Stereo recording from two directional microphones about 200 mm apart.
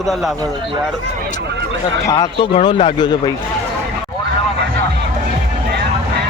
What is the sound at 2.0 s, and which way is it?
Speech, 20° left (ahead or behind).